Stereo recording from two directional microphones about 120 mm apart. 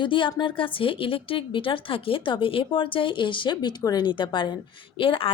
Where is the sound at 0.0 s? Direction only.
45° left (ahead or behind).